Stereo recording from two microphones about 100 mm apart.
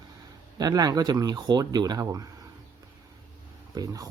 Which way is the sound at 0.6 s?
40° right (ahead or behind).